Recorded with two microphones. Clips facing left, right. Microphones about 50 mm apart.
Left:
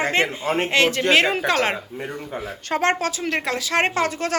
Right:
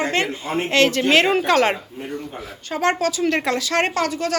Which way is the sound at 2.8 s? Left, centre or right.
Left.